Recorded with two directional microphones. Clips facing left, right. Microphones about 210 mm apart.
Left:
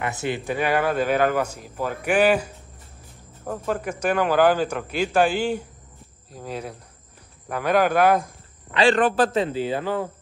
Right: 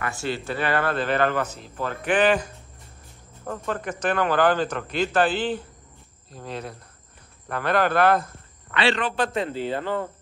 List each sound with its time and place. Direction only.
0.0 s a man's voice: 20° left (ahead or behind)
8.7 s speech: 50° left (ahead or behind)
9.1 s a man's voice: 35° left (ahead or behind)
9.5 s a man's voice: 10° left (ahead or behind)